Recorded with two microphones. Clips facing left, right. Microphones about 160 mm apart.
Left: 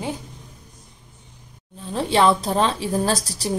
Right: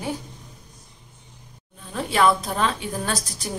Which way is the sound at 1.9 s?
30° left (ahead or behind).